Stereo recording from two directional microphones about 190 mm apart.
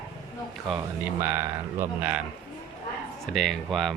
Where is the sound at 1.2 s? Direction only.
10° right (ahead or behind).